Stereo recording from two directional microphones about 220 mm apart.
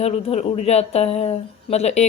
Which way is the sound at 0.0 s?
30° left (ahead or behind).